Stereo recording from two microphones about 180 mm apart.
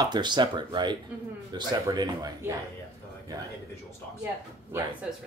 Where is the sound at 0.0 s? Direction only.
25° right (ahead or behind).